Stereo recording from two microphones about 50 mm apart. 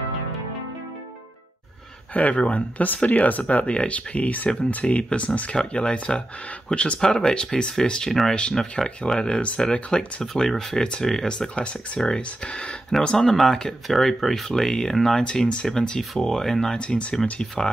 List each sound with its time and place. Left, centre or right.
2.1 s speech: left
7.0 s speech: centre
8.1 s speech: centre; by 10.2 s left
10.2 s speech: centre
15.2 s speech: left
15.6 s speech: centre
16.7 s speech: left